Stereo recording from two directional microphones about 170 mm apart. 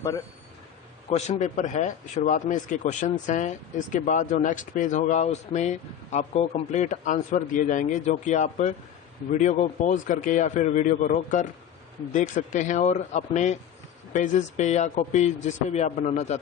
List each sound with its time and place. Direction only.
1.1 s speech: 40° left (ahead or behind)